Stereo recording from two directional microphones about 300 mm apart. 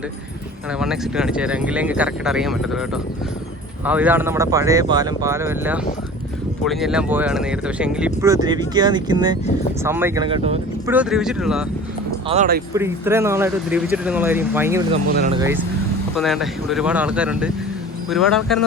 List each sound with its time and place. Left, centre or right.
0.8 s speech: centre
10.9 s speech: centre
12.3 s speech: right
12.7 s speech: centre